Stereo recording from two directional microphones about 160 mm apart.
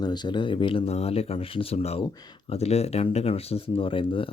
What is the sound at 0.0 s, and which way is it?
Speech, 25° left (ahead or behind).